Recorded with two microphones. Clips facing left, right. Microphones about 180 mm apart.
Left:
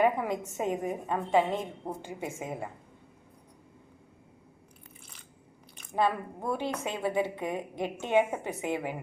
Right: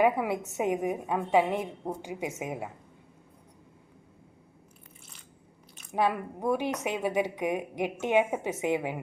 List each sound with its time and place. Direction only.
0.0 s a woman's voice: 10° right (ahead or behind)
5.9 s a woman's voice: 15° right (ahead or behind)